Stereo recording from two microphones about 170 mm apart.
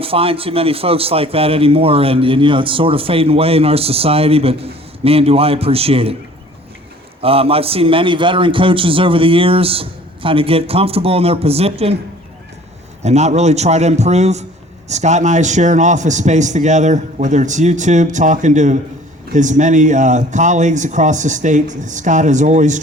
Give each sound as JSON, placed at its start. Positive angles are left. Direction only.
{"t": 0.0, "sound": "a man's voice", "side_deg": -35}
{"t": 7.2, "sound": "a man's voice", "side_deg": -35}
{"t": 13.0, "sound": "a man's voice", "side_deg": -40}